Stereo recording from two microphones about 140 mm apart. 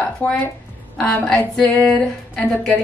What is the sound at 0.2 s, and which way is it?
A woman's voice, 10° left (ahead or behind).